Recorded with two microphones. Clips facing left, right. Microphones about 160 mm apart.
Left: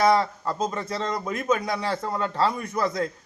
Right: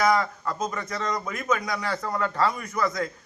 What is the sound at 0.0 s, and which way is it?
A man's voice, 30° left (ahead or behind).